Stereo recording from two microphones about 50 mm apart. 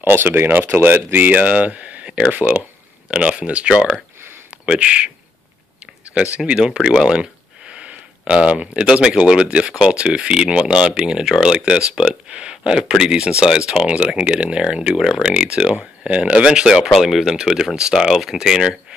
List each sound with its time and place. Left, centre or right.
0.0 s speech: right
6.3 s speech: right